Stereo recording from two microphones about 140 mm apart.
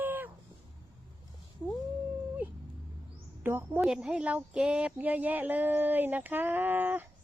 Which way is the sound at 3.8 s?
5° right (ahead or behind).